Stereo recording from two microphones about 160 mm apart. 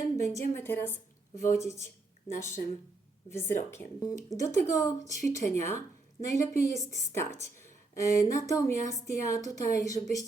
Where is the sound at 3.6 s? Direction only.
15° left (ahead or behind).